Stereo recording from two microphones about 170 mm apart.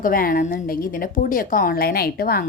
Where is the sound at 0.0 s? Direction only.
55° left (ahead or behind).